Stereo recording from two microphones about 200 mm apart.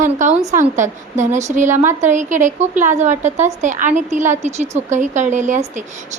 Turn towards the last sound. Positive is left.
turn(degrees=-40)  # may be behind; listen again after turning